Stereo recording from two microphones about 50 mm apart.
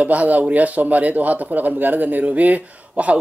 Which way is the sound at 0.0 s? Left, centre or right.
Right.